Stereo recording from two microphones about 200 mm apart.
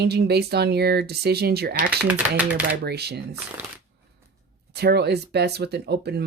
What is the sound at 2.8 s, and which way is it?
Speech, 55° right (ahead or behind).